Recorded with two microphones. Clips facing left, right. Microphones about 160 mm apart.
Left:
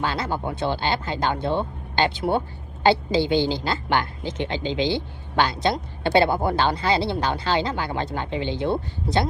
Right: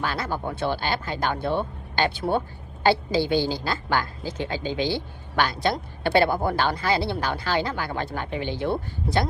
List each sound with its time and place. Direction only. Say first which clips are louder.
0.0 s a woman's voice: left 2 dB; 20° left (ahead or behind)